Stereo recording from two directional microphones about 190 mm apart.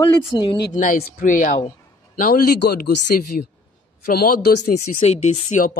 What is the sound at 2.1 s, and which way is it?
Speech, 50° left (ahead or behind).